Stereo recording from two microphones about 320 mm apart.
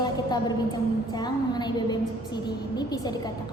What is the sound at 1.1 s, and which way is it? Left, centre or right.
A woman's voice, centre.